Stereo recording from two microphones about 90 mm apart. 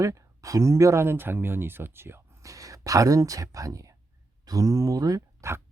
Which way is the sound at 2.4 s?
40° right (ahead or behind).